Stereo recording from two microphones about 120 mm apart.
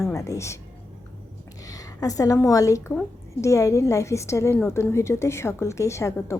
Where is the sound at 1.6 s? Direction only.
30° left (ahead or behind).